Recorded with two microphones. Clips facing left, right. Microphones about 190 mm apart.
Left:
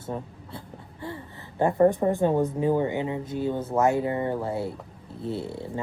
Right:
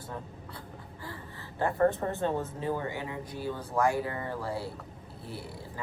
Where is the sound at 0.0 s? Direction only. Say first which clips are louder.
Left 7 dB; 25° left (ahead or behind).